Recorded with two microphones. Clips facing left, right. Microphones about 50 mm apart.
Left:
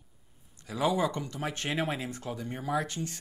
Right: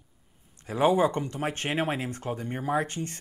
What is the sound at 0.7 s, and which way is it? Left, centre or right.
Speech, right.